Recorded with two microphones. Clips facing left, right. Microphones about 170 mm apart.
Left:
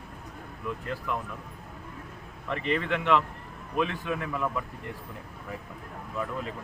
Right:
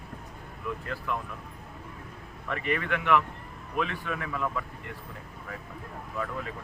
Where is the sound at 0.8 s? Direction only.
20° left (ahead or behind).